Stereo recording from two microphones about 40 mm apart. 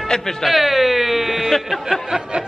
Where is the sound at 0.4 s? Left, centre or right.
Centre.